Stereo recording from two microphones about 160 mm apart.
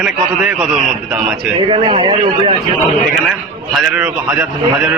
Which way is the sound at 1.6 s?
35° right (ahead or behind).